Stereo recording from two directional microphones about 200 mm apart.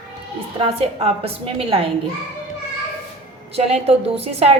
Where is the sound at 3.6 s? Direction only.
30° right (ahead or behind).